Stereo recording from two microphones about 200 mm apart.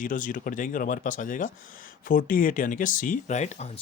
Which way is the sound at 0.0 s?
40° left (ahead or behind).